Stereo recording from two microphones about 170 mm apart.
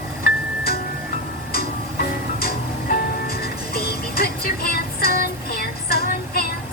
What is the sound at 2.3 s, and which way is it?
Music, 65° left (ahead or behind).